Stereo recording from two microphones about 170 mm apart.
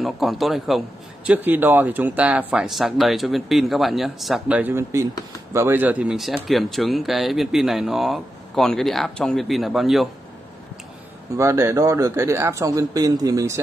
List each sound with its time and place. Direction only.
0.0 s a man's voice: centre (ahead or behind)
11.3 s speech: 15° right (ahead or behind)